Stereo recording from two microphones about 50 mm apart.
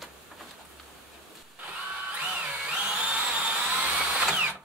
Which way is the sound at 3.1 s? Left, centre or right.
Right.